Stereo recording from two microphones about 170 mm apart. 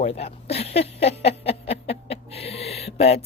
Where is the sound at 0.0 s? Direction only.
35° left (ahead or behind).